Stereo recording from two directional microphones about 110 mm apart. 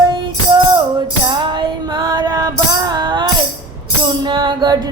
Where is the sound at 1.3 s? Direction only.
45° right (ahead or behind).